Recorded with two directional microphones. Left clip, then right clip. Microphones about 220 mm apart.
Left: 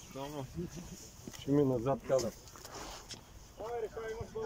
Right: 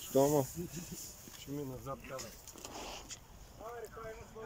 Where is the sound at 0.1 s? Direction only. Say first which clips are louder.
Right 14 dB; 30° right (ahead or behind).